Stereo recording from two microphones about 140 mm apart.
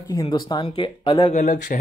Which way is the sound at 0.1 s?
30° left (ahead or behind).